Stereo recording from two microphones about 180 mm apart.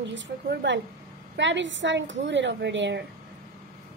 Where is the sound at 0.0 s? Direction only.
90° right.